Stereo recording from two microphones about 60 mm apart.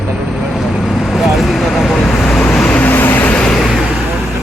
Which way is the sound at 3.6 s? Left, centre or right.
Centre.